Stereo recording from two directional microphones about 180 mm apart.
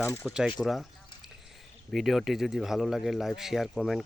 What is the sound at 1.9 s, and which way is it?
Speech, centre (ahead or behind).